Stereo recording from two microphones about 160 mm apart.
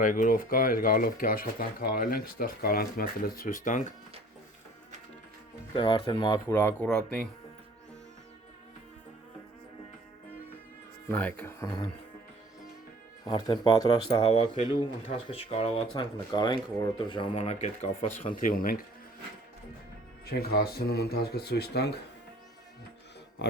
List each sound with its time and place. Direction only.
0.0 s speech: 55° left (ahead or behind)
5.7 s speech: 30° left (ahead or behind)
6.5 s speech: 10° left (ahead or behind)
11.1 s speech: 10° left (ahead or behind)
13.2 s speech: 25° left (ahead or behind); by 18.1 s 45° left (ahead or behind)
18.3 s speech: 60° left (ahead or behind)
20.2 s speech: 75° left (ahead or behind); by 21.9 s 90° left
23.4 s speech: 90° left